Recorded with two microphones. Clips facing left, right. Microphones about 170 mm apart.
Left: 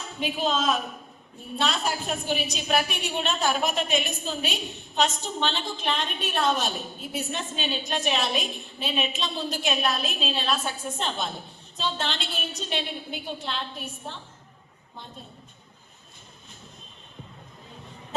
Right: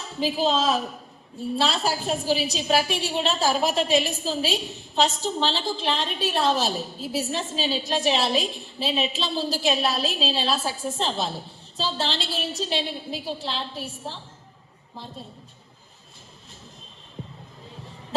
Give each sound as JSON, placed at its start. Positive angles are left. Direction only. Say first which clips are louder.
{"t": 0.2, "sound": "a woman's voice", "louder": "right 4 dB", "side_deg": -30}